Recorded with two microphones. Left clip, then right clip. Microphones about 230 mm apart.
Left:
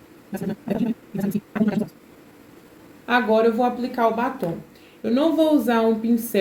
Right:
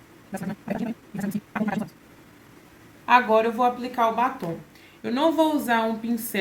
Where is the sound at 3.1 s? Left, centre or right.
Right.